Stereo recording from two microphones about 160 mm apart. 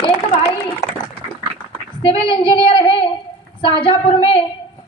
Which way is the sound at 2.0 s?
35° left (ahead or behind).